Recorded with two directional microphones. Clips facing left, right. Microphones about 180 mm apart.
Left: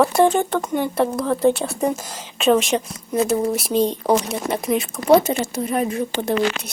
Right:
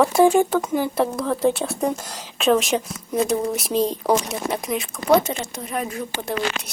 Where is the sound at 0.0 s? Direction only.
5° right (ahead or behind).